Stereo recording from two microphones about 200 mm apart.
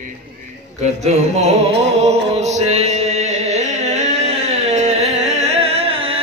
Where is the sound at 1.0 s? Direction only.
30° right (ahead or behind).